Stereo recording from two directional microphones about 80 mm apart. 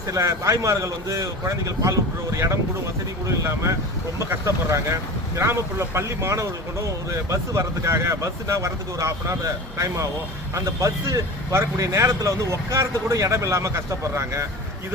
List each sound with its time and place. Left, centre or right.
0.1 s speech: right